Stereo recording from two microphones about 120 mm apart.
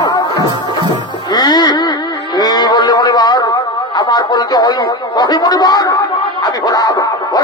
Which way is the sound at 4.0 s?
35° left (ahead or behind).